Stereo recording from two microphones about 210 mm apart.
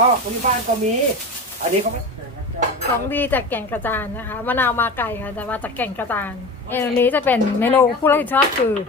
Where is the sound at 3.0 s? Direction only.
10° left (ahead or behind).